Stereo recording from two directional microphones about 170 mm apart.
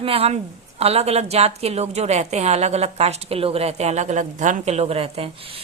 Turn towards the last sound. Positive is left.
turn(degrees=-35)  # may be behind; listen again after turning